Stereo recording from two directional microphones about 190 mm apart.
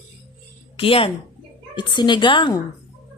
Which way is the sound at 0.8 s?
30° left (ahead or behind).